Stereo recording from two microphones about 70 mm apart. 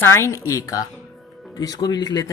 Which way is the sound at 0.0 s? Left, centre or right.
Left.